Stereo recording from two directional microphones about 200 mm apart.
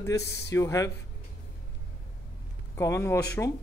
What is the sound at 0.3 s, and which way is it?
Speech, 15° left (ahead or behind).